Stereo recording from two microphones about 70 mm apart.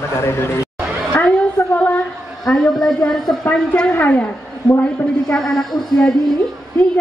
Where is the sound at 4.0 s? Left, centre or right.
Left.